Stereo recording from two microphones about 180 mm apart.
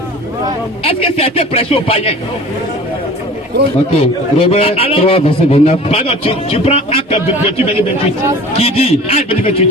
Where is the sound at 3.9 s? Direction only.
35° left (ahead or behind).